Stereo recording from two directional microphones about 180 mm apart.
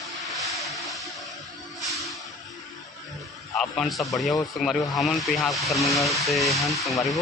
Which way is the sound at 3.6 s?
Centre (ahead or behind).